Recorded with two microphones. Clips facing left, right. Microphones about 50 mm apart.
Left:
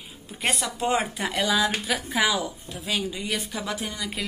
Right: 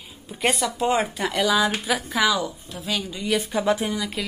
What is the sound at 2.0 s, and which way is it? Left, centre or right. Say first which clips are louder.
Speech: right 2 dB; centre.